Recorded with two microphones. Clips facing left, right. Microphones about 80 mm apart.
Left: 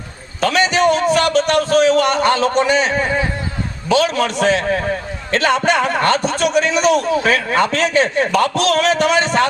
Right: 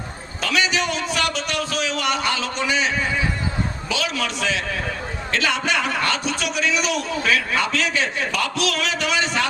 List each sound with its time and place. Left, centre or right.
0.4 s a man's voice: left